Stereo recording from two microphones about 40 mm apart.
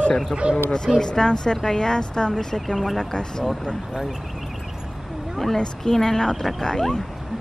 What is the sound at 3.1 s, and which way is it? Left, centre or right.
Speech, centre.